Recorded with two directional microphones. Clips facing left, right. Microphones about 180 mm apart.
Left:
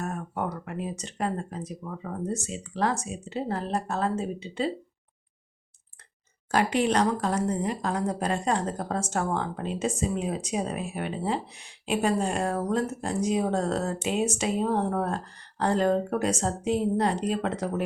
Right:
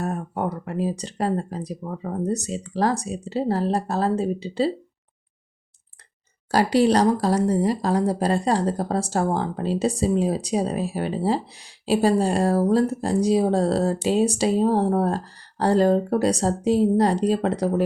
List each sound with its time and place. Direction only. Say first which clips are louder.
0.0 s a woman's voice: right 5 dB; 35° right (ahead or behind)
6.5 s a woman's voice: right 6 dB; 35° right (ahead or behind)